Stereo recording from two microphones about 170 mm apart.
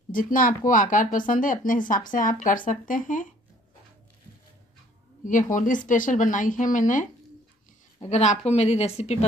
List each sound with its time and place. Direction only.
0.1 s speech: 55° left (ahead or behind)
5.2 s a woman's voice: 50° left (ahead or behind)